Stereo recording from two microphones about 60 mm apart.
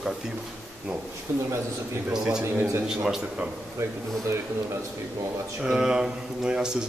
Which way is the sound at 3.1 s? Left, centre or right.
Centre.